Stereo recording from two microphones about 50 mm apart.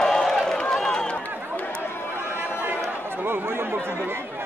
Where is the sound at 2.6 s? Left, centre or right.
Right.